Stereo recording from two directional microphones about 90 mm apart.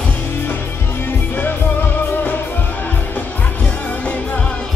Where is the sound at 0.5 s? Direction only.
25° left (ahead or behind).